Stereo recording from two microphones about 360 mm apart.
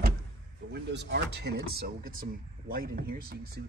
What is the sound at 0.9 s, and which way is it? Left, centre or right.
Speech, right.